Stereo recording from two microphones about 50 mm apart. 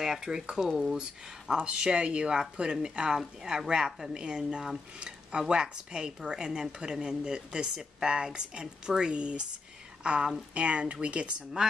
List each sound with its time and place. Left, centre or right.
0.0 s speech: centre